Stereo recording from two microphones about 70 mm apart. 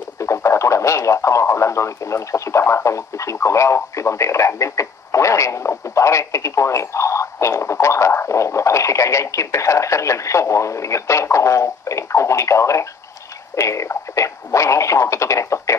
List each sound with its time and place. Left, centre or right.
0.2 s speech: left